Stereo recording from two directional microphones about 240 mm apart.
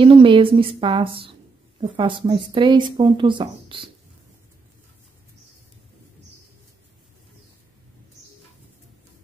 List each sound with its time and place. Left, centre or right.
0.0 s speech: right